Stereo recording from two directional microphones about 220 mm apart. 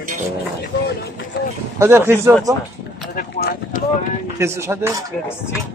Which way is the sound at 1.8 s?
10° right (ahead or behind).